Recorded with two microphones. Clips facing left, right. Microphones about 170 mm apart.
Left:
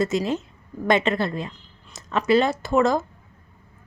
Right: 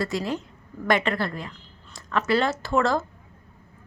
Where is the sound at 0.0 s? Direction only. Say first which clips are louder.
Left 4 dB; 20° left (ahead or behind).